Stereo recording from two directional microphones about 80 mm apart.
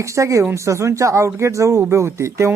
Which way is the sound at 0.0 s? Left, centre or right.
Right.